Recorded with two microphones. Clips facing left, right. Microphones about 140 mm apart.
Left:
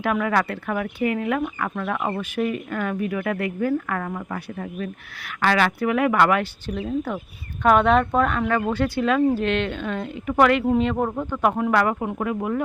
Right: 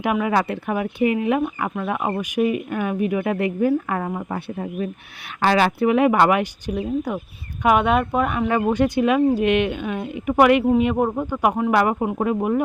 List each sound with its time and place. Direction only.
0.0 s speech: 15° right (ahead or behind)
5.4 s speech: 30° right (ahead or behind)